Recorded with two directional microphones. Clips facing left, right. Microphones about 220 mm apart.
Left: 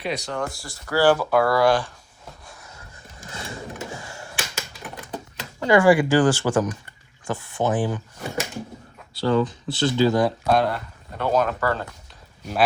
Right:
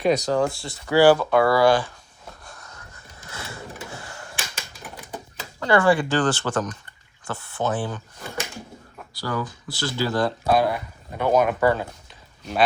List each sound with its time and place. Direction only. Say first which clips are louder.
0.0 s speech: right 7 dB; 45° right (ahead or behind); by 1.0 s 20° right (ahead or behind)
1.0 s speech: right 1 dB; centre (ahead or behind)
2.4 s a sound: even; 5° left (ahead or behind)
3.9 s a sound: left 2 dB; 10° left (ahead or behind)
5.5 s speech: left 3 dB; 10° left (ahead or behind)
9.1 s speech: left 8 dB; 25° left (ahead or behind)
10.4 s speech: even; 5° right (ahead or behind)